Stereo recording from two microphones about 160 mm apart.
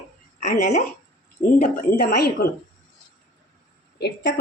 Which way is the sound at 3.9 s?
90° left.